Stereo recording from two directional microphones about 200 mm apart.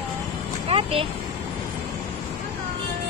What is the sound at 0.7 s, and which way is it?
Speech, 30° right (ahead or behind).